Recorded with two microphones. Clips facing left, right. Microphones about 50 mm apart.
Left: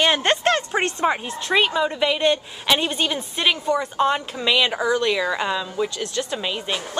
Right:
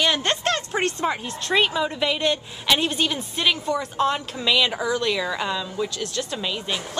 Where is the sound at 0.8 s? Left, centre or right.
Centre.